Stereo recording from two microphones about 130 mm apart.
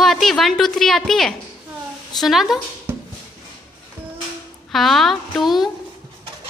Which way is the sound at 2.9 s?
20° right (ahead or behind).